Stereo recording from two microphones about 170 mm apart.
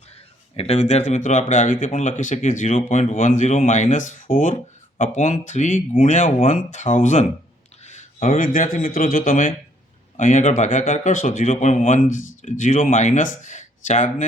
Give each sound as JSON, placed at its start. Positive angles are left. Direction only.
{"t": 0.5, "sound": "a man's voice", "side_deg": 35}